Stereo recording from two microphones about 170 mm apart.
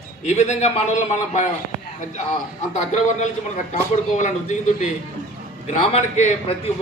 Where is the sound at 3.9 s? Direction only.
45° left (ahead or behind).